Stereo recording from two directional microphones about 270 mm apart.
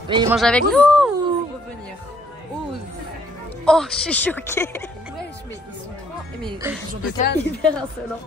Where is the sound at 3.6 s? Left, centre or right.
Centre.